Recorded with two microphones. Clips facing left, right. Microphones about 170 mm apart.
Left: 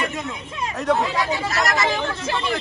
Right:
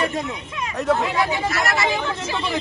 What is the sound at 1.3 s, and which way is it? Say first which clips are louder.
Speech: even; 40° left (ahead or behind).